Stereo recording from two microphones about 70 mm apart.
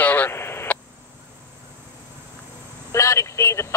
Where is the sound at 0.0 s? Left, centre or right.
Left.